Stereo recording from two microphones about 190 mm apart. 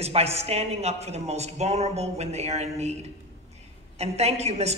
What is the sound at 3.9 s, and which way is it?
Speech, 35° right (ahead or behind).